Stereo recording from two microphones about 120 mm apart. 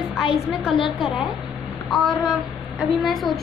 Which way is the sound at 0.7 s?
45° left (ahead or behind).